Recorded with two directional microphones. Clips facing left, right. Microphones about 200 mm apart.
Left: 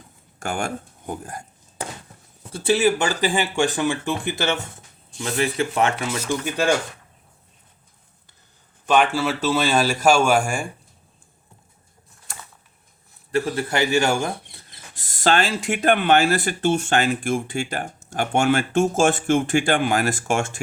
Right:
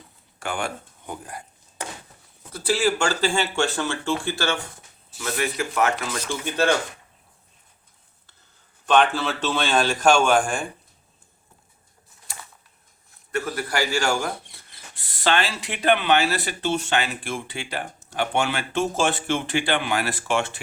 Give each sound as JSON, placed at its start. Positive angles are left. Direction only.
{"t": 0.3, "sound": "speech", "side_deg": 45}
{"t": 2.5, "sound": "a man's voice", "side_deg": 20}
{"t": 6.4, "sound": "speech", "side_deg": 10}
{"t": 8.9, "sound": "speech", "side_deg": 10}
{"t": 13.3, "sound": "a man's voice", "side_deg": 30}
{"t": 14.9, "sound": "speech", "side_deg": 45}